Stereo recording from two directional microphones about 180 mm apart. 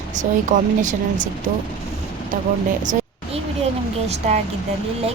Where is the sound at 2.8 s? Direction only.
45° right (ahead or behind).